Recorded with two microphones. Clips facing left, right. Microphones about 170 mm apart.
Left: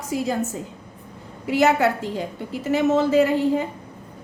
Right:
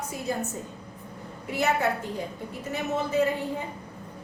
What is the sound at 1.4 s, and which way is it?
A woman's voice, 90° left.